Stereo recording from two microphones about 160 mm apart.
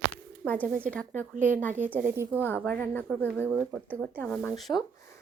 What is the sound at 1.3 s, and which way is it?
Speech, 55° right (ahead or behind).